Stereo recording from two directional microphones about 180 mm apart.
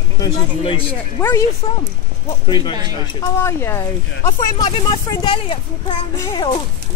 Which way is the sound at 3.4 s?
15° left (ahead or behind).